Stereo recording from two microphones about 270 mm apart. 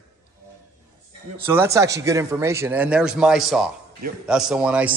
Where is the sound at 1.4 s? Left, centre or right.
Centre.